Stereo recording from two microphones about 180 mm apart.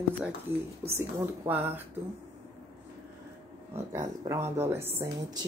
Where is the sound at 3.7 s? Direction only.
15° right (ahead or behind).